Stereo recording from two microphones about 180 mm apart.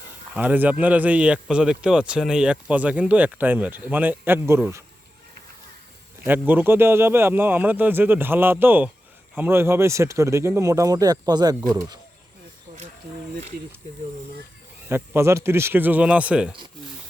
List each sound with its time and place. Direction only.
0.3 s a man's voice: 10° right (ahead or behind)
6.2 s a man's voice: 10° right (ahead or behind)
14.8 s a man's voice: 15° right (ahead or behind)